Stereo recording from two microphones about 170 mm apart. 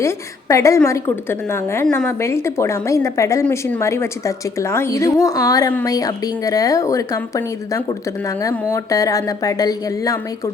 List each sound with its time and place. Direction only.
0.0 s a woman's voice: 20° left (ahead or behind)